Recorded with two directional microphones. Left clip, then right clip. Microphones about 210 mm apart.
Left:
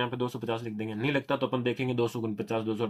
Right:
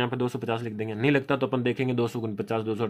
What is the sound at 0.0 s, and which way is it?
Speech, 50° right (ahead or behind).